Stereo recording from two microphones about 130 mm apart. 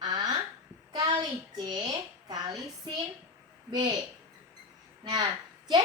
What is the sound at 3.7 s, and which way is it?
Speech, 35° right (ahead or behind).